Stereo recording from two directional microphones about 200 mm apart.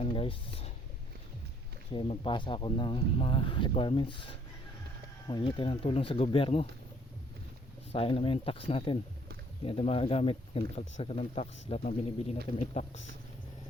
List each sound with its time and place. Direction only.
0.0 s a sound: 25° left (ahead or behind)
1.9 s speech: 25° left (ahead or behind)
7.9 s speech: 25° left (ahead or behind)